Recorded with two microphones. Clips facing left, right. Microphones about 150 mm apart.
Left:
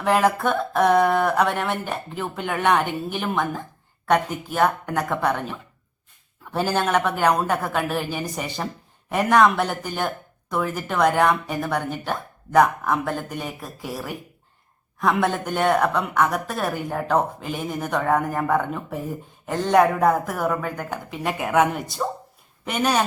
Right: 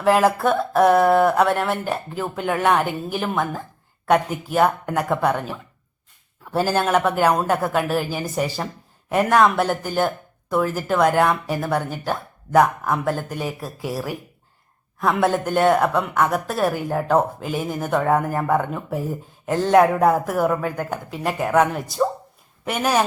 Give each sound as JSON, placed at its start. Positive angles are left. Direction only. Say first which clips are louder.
{"t": 0.0, "sound": "speech", "louder": "right 3 dB", "side_deg": -5}